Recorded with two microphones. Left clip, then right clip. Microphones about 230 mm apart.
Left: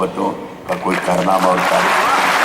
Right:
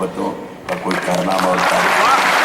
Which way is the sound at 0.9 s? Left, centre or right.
Right.